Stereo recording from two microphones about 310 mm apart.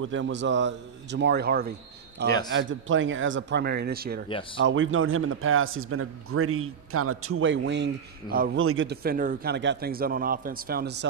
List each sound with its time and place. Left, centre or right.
0.0 s speech: right